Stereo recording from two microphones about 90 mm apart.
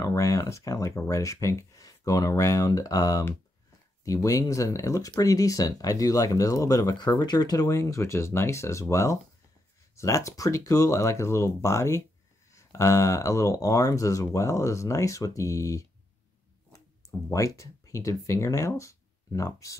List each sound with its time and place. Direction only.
0.0 s speech: 40° left (ahead or behind)